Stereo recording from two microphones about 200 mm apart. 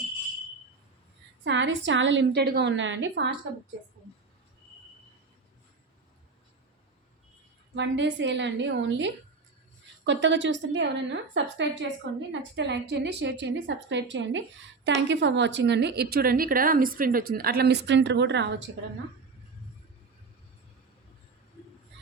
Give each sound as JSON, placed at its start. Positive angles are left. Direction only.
{"t": 1.5, "sound": "a woman's voice", "side_deg": -65}
{"t": 7.8, "sound": "a woman's voice", "side_deg": -65}